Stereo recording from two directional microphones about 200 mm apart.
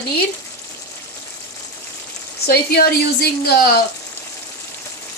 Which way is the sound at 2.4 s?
50° left (ahead or behind).